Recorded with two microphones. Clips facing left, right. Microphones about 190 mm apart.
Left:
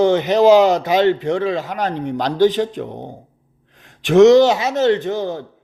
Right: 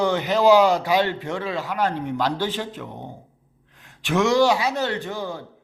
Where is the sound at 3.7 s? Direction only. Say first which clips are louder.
Left 3 dB; 20° left (ahead or behind).